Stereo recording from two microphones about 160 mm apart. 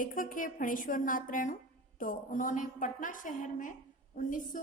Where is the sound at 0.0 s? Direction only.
60° left (ahead or behind).